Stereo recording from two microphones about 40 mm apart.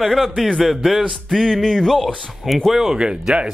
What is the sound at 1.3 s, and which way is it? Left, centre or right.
Music, centre.